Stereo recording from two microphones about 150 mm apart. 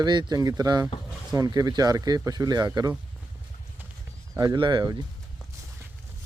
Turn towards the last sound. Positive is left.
turn(degrees=-30)  # may be behind; listen again after turning